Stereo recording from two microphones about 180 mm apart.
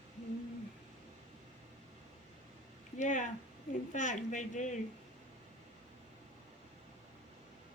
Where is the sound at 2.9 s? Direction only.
45° left (ahead or behind).